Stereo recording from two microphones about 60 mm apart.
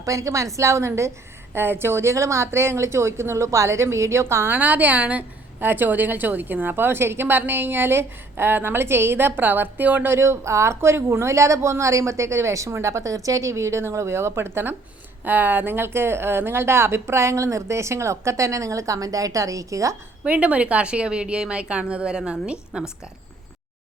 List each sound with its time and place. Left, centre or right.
0.0 s a woman's voice: right
1.5 s speech: right
4.5 s a woman's voice: right
10.1 s speech: right
15.2 s speech: right
20.2 s a woman's voice: right